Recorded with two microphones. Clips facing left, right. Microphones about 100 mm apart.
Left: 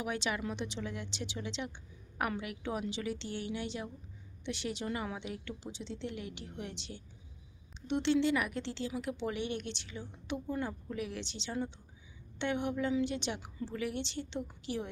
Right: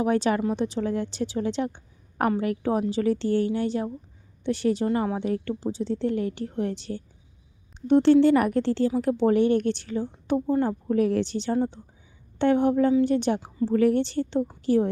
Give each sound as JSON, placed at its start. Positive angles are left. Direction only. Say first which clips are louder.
{"t": 0.0, "sound": "a woman's voice", "louder": "right 13 dB", "side_deg": -40}